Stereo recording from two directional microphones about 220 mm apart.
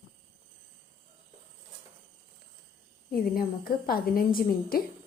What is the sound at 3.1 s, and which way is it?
A woman's voice, 40° left (ahead or behind).